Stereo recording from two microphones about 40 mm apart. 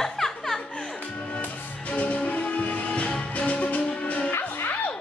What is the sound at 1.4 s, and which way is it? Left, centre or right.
Music, left.